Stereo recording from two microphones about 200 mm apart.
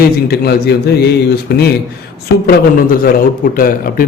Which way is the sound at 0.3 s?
55° left (ahead or behind).